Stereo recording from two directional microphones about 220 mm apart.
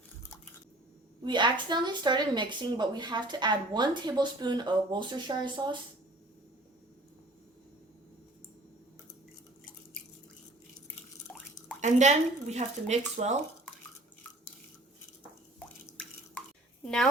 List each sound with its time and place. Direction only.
1.2 s speech: 20° right (ahead or behind)
11.8 s speech: 30° right (ahead or behind)
15.5 s drip: 5° left (ahead or behind)
16.8 s a woman's voice: 5° left (ahead or behind)